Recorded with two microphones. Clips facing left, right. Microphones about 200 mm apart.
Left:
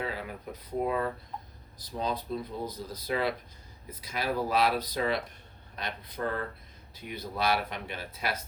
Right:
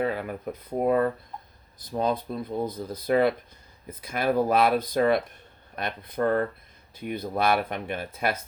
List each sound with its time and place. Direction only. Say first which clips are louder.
0.0 s speech: right 8 dB; 55° right (ahead or behind)